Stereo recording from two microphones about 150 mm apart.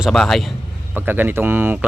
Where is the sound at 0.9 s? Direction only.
15° right (ahead or behind).